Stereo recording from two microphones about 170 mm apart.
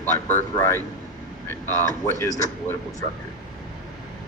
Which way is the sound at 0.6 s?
15° left (ahead or behind).